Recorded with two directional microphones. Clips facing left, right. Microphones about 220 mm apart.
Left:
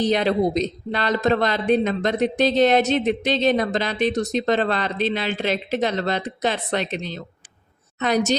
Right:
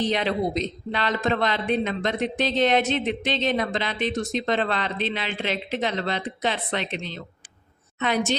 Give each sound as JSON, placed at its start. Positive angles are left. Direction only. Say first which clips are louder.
{"t": 0.0, "sound": "speech", "louder": "left 5 dB", "side_deg": 40}